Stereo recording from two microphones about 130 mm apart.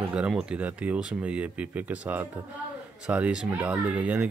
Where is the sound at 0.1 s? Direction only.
10° right (ahead or behind).